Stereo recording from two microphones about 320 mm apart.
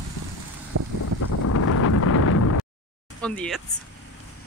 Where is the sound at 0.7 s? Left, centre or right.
Right.